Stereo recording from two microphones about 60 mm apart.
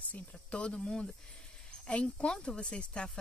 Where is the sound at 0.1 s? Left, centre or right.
Centre.